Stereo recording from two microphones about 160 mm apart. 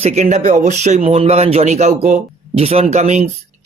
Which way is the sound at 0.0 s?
45° right (ahead or behind).